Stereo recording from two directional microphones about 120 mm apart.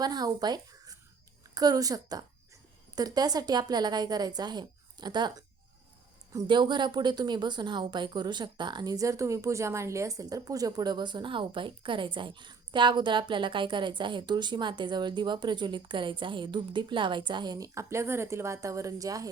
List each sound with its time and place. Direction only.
0.0 s a woman's voice: 35° right (ahead or behind)
6.5 s a woman's voice: 40° right (ahead or behind)